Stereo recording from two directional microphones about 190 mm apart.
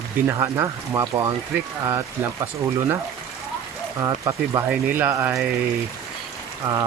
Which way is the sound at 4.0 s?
15° right (ahead or behind).